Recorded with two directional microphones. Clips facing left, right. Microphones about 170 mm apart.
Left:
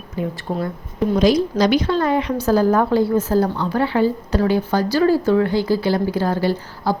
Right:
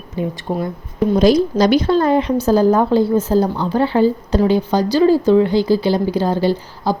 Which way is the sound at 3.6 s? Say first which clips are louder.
Right 3 dB; 30° right (ahead or behind).